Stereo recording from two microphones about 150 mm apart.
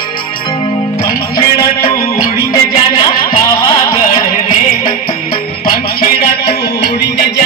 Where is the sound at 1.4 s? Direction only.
75° left (ahead or behind).